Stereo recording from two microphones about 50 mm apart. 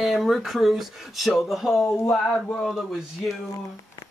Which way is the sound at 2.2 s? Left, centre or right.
Centre.